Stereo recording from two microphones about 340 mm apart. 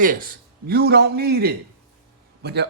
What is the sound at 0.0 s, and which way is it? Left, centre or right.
Speech, right.